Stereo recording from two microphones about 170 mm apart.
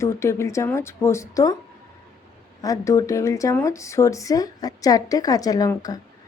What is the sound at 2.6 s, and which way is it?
Speech, 20° left (ahead or behind).